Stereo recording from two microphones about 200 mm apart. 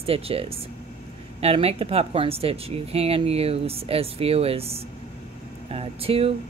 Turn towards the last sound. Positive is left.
turn(degrees=-30)  # may be behind; listen again after turning